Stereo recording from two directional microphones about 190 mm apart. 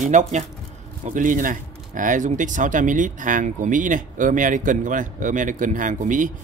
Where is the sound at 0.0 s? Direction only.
40° right (ahead or behind).